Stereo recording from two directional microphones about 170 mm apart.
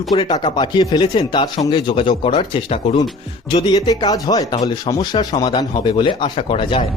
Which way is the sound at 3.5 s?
25° left (ahead or behind).